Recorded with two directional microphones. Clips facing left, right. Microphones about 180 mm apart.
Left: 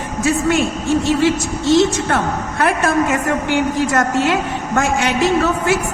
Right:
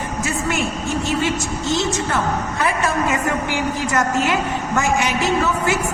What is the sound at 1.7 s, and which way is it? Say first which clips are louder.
A woman's voice: left 7 dB; 65° left (ahead or behind).